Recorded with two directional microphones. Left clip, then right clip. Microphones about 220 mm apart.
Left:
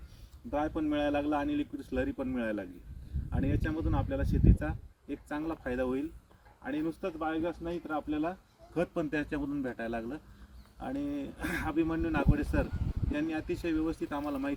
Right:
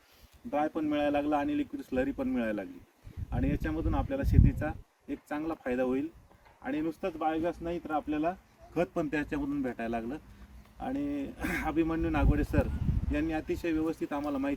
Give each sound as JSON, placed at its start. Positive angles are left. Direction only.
{"t": 0.5, "sound": "speech", "side_deg": 5}